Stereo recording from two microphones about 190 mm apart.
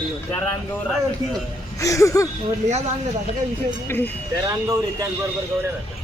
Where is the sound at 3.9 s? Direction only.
10° left (ahead or behind).